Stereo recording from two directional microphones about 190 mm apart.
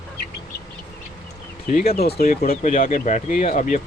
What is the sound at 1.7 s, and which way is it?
Speech, 50° left (ahead or behind).